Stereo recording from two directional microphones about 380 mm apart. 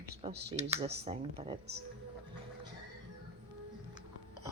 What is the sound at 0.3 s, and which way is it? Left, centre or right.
Speech, right.